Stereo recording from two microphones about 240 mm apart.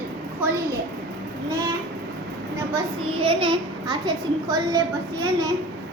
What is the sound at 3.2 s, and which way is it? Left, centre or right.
A child's voice, right.